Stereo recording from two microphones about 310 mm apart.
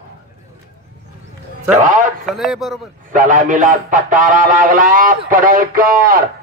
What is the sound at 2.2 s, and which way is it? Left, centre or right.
Speech, centre.